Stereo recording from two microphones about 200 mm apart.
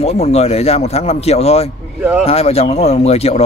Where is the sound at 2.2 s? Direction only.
30° left (ahead or behind).